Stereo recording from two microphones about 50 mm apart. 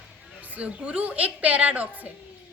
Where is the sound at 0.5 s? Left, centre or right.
Right.